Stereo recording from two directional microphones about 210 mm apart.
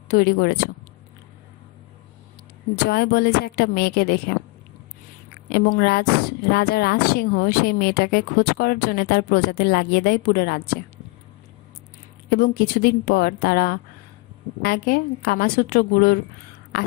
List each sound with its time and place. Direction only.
0.1 s speech: 45° left (ahead or behind)
2.7 s speech: 50° left (ahead or behind)
5.5 s speech: 45° left (ahead or behind)
12.3 s speech: 45° left (ahead or behind)